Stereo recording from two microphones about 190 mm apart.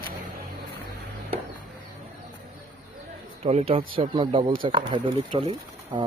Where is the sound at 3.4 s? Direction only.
30° right (ahead or behind).